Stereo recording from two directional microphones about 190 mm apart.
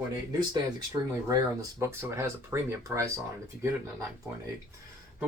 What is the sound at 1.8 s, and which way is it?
Speech, 15° right (ahead or behind).